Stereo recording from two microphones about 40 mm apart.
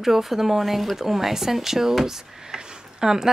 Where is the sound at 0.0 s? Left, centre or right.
Centre.